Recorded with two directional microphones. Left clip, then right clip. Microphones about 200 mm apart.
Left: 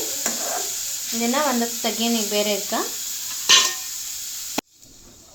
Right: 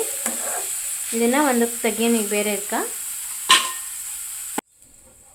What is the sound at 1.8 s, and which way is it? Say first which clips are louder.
Frying: right 2 dB; 25° right (ahead or behind).